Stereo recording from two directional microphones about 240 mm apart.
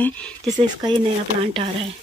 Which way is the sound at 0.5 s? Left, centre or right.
Centre.